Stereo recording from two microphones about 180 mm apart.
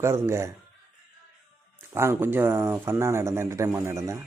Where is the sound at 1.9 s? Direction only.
15° right (ahead or behind).